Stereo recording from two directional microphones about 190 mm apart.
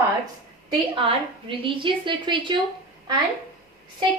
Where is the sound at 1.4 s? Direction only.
25° right (ahead or behind).